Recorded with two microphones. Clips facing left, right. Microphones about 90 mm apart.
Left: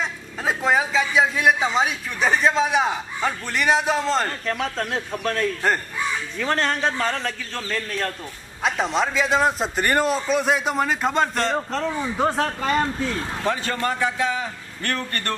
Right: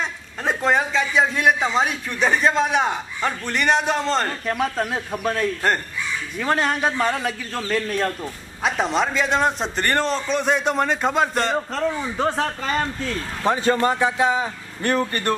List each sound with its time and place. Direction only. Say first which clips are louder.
0.0 s a man's voice: even; 5° left (ahead or behind)
4.5 s a man's voice: right 2 dB; 10° right (ahead or behind); by 13.2 s 10° left (ahead or behind)
13.5 s speech: right 6 dB; 20° right (ahead or behind)